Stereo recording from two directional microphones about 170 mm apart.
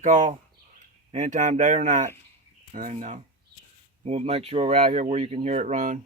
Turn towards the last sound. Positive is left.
turn(degrees=-50)  # may be behind; listen again after turning